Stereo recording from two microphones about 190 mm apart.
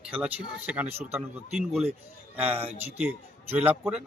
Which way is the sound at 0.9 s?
35° right (ahead or behind).